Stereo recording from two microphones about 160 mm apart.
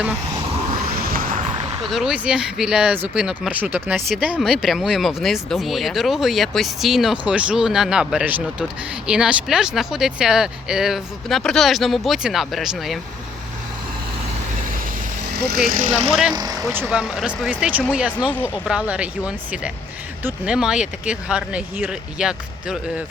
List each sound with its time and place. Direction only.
0.9 s a sound: 70° right (ahead or behind)
1.8 s speech: centre (ahead or behind)
15.4 s speech: 85° right
15.7 s speech: 50° right (ahead or behind)
16.3 s speech: 25° right (ahead or behind)
16.7 s speech: 5° right (ahead or behind)